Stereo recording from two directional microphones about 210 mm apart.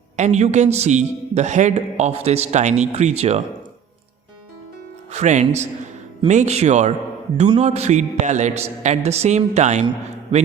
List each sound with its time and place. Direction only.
0.2 s a woman's voice: 35° right (ahead or behind)
5.1 s a woman's voice: 35° right (ahead or behind)